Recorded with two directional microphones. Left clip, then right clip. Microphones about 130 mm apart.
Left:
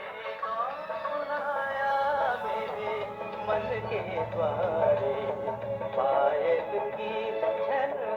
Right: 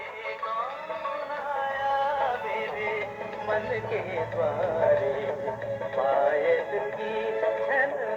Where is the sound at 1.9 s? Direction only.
Centre (ahead or behind).